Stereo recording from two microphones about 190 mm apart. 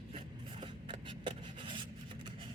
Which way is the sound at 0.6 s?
25° right (ahead or behind).